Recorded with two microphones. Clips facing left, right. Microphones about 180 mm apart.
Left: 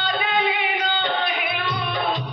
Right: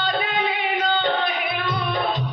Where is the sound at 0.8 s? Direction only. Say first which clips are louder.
Right 2 dB; 45° right (ahead or behind).